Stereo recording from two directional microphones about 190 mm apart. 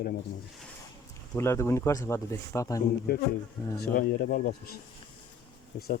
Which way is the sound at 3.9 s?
50° left (ahead or behind).